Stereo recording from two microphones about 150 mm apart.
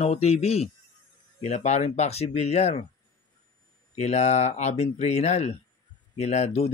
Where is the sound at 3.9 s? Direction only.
45° left (ahead or behind).